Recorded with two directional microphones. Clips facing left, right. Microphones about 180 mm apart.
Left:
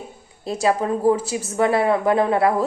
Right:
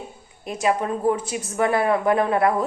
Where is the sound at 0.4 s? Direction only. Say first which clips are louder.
Left 2 dB; 35° left (ahead or behind).